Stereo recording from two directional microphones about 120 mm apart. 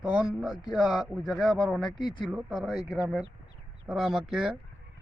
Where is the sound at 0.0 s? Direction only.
10° right (ahead or behind).